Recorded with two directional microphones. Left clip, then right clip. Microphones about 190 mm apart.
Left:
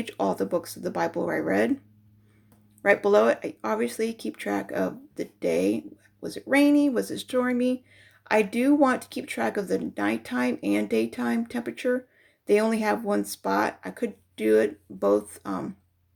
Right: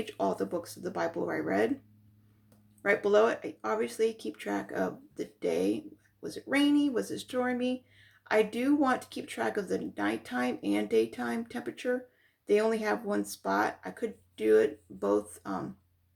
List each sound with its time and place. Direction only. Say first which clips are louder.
0.0 s speech: left 4 dB; 35° left (ahead or behind)
2.8 s speech: left 5 dB; 35° left (ahead or behind)